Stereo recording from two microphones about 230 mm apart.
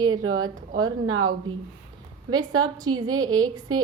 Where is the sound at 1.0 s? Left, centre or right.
Right.